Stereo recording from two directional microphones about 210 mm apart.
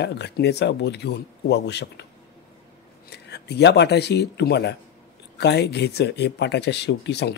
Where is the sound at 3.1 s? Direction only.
50° left (ahead or behind).